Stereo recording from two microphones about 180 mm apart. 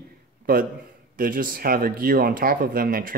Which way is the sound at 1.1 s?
50° right (ahead or behind).